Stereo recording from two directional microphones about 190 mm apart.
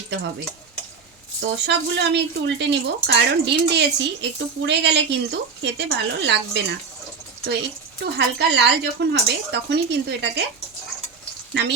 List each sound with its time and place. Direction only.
1.4 s speech: 65° right (ahead or behind)
8.0 s speech: 60° right (ahead or behind)
11.5 s speech: 65° right (ahead or behind)